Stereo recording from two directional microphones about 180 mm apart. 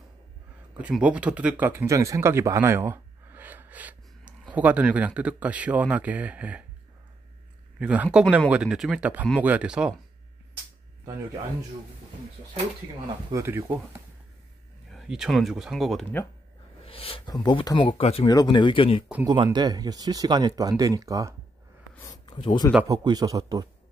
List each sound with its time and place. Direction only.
0.7 s speech: 5° right (ahead or behind)
7.8 s speech: 10° right (ahead or behind)
13.3 s speech: 15° right (ahead or behind)
14.9 s speech: centre (ahead or behind)
16.8 s speech: 30° left (ahead or behind)
19.2 s speech: 25° right (ahead or behind)
21.9 s a sound: 20° left (ahead or behind)
22.8 s speech: 20° right (ahead or behind)